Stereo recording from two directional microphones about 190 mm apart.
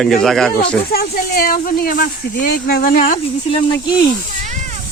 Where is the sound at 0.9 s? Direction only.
55° left (ahead or behind).